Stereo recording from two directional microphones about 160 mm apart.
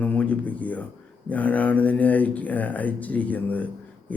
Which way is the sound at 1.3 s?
10° left (ahead or behind).